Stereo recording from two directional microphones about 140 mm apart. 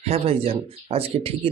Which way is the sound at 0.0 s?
45° right (ahead or behind).